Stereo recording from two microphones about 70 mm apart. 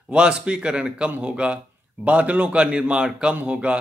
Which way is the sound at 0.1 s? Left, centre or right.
Centre.